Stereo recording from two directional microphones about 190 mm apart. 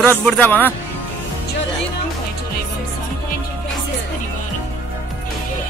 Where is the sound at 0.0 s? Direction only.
10° left (ahead or behind).